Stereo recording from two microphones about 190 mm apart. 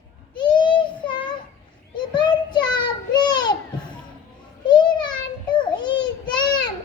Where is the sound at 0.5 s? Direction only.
25° left (ahead or behind).